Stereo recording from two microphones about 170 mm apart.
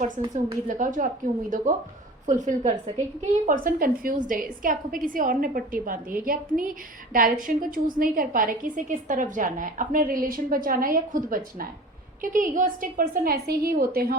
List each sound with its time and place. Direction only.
0.3 s a woman's voice: 50° right (ahead or behind)